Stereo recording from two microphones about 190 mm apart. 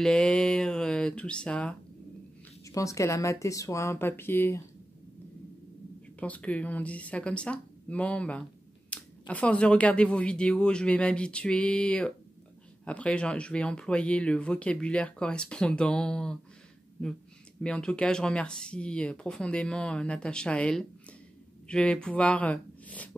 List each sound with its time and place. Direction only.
0.0 s speech: 5° left (ahead or behind)
2.6 s speech: 15° left (ahead or behind)
6.1 s speech: 5° left (ahead or behind)
8.9 s a sound: 5° left (ahead or behind)
9.3 s speech: 5° left (ahead or behind)
17.6 s speech: 5° left (ahead or behind)